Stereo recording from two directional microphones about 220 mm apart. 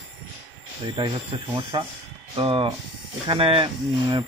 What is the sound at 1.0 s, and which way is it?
Speech, 25° right (ahead or behind).